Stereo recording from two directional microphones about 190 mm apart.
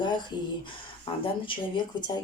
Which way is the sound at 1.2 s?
25° left (ahead or behind).